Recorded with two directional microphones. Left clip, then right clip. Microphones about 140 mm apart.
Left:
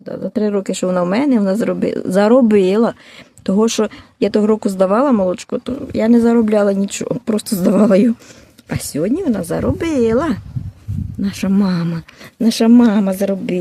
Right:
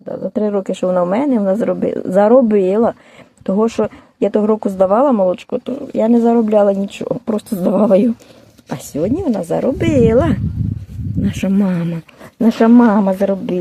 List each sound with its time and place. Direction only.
0.1 s a woman's voice: 30° left (ahead or behind)
9.0 s speech: 15° left (ahead or behind)
9.5 s speech: 5° left (ahead or behind)